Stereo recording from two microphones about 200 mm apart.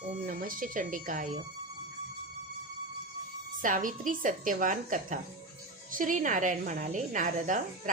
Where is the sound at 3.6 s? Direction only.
40° right (ahead or behind).